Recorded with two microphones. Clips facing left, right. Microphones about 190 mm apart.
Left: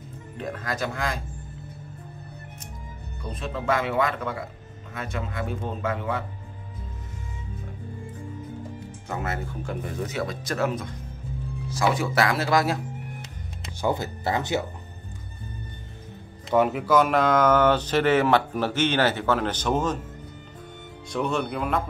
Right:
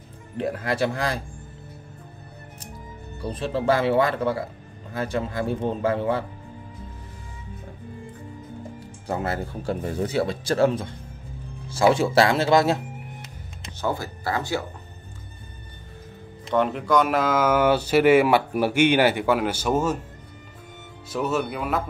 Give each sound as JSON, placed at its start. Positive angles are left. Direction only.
{"t": 0.4, "sound": "speech", "side_deg": -30}
{"t": 3.2, "sound": "speech", "side_deg": -35}
{"t": 8.7, "sound": "speech", "side_deg": -30}
{"t": 13.7, "sound": "speech", "side_deg": 20}
{"t": 16.4, "sound": "speech", "side_deg": 5}
{"t": 21.1, "sound": "speech", "side_deg": -5}